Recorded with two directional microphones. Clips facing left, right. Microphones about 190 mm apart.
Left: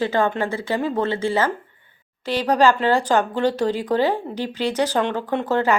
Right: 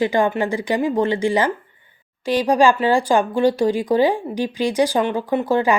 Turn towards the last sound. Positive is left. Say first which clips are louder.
# right 2 dB
turn(degrees=-10)  # may be behind; listen again after turning